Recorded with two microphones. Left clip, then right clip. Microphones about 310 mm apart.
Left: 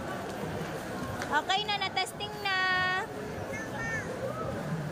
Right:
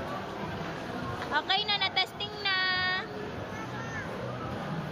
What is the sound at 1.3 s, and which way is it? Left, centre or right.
Speech, centre.